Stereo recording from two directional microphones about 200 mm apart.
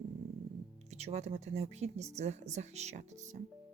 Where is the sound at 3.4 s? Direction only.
45° right (ahead or behind).